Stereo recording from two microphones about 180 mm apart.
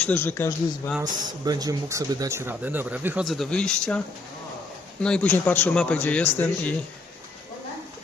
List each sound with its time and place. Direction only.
0.0 s a man's voice: 10° left (ahead or behind)
1.5 s speech: 20° right (ahead or behind)
3.2 s speech: centre (ahead or behind)
5.0 s a man's voice: 5° left (ahead or behind)